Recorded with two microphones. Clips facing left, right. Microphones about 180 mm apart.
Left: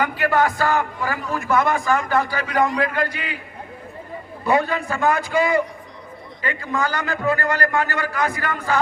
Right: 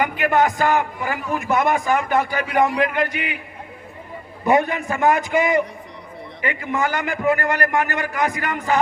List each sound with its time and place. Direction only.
0.0 s a man's voice: 20° right (ahead or behind)
4.4 s a man's voice: 20° right (ahead or behind)